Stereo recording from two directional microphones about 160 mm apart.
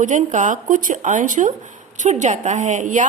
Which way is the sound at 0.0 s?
50° right (ahead or behind).